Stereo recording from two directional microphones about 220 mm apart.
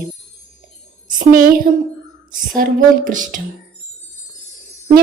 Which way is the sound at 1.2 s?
40° right (ahead or behind).